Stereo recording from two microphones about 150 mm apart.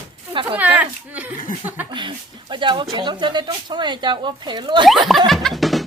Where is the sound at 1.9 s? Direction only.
35° right (ahead or behind).